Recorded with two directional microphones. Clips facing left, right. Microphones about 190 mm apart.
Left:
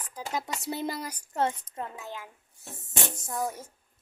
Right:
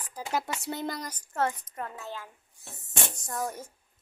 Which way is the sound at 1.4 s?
25° left (ahead or behind).